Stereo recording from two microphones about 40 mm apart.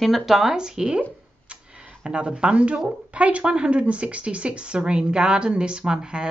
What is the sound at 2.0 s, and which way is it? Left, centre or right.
Speech, right.